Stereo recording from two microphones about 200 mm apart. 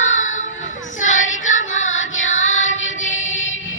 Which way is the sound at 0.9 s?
40° left (ahead or behind).